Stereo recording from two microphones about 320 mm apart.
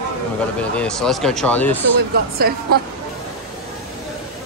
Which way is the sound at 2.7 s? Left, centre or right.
Right.